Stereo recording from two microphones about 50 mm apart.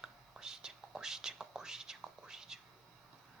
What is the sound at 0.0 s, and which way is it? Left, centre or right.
Whispering, centre.